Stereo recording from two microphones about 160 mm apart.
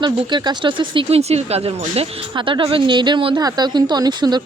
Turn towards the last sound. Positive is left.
turn(degrees=-25)  # may be behind; listen again after turning